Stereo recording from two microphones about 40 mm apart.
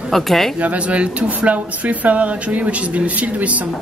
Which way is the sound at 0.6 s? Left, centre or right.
Right.